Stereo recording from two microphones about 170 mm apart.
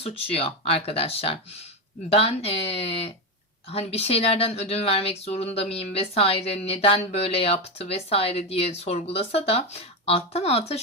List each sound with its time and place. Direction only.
0.0 s speech: 35° left (ahead or behind)